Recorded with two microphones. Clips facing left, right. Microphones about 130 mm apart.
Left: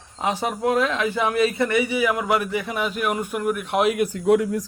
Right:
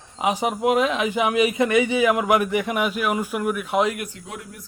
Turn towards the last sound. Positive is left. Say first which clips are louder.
# left 19 dB
turn(degrees=90)